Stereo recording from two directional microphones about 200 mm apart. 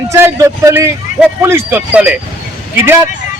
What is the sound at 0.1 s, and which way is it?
A man's voice, 15° right (ahead or behind).